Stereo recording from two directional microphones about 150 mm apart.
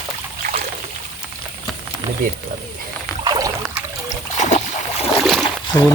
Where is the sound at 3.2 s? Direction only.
25° right (ahead or behind).